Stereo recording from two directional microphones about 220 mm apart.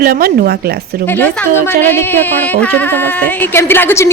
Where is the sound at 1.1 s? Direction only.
10° left (ahead or behind).